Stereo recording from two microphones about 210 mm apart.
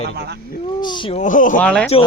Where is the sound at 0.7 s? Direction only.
20° left (ahead or behind).